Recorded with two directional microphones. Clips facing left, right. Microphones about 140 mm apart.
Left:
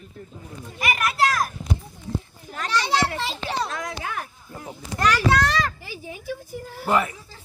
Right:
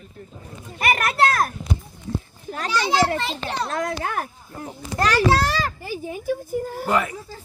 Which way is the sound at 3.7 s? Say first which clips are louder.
Right 5 dB; 50° right (ahead or behind).